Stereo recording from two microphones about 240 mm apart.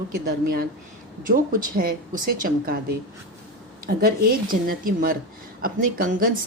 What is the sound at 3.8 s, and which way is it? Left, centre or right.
A woman's voice, right.